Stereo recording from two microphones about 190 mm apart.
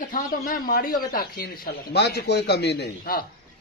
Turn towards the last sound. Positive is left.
turn(degrees=55)  # may be behind; listen again after turning